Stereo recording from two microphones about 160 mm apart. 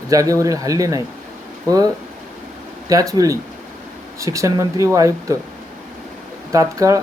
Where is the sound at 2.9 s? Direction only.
20° right (ahead or behind).